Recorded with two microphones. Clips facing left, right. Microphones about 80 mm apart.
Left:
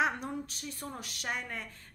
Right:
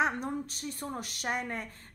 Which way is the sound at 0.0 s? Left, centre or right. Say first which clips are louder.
Right 1 dB; right.